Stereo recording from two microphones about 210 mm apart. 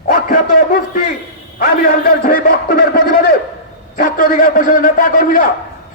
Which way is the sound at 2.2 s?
40° left (ahead or behind).